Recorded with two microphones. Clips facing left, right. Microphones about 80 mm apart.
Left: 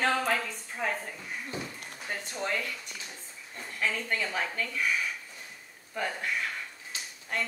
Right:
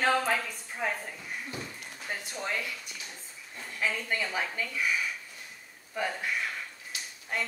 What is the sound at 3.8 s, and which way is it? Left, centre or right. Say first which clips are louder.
A woman's voice: even; centre.